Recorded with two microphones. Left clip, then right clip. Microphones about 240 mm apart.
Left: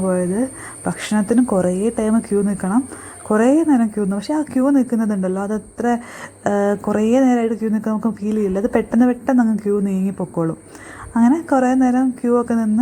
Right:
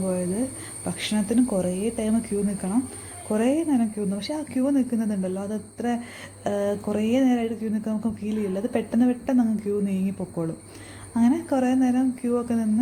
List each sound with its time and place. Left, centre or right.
0.1 s a woman's voice: centre